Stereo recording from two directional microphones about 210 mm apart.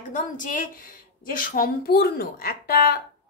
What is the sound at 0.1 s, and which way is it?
A woman's voice, 40° left (ahead or behind).